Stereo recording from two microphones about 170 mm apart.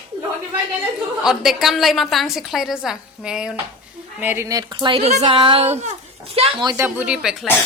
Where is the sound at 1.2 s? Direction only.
Centre (ahead or behind); by 6.9 s 25° right (ahead or behind).